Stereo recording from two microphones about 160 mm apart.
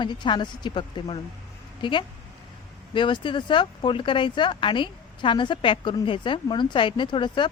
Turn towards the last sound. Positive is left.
turn(degrees=30)  # may be behind; listen again after turning